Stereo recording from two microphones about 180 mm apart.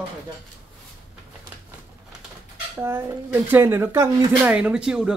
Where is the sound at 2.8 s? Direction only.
10° right (ahead or behind).